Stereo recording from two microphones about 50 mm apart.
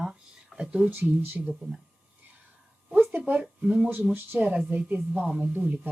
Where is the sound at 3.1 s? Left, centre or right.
Right.